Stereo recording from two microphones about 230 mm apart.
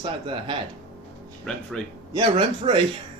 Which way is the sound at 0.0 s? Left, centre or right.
Right.